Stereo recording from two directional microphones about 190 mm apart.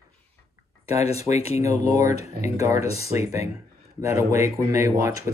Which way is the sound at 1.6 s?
15° right (ahead or behind).